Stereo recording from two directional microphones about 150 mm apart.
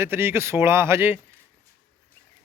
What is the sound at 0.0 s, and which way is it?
Speech, 15° right (ahead or behind).